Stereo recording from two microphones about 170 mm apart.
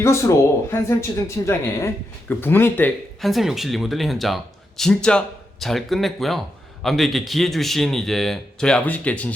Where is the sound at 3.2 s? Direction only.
Centre (ahead or behind).